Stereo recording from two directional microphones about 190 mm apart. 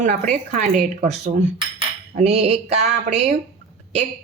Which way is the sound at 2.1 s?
35° right (ahead or behind).